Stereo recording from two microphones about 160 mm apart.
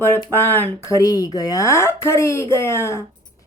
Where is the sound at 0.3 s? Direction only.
15° left (ahead or behind).